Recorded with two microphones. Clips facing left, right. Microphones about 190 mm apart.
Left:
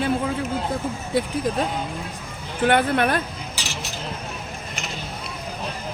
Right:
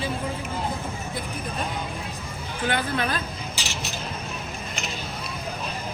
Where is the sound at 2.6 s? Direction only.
60° left (ahead or behind).